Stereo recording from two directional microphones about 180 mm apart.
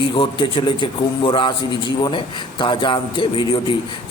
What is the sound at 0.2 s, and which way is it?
A man's voice, 25° left (ahead or behind).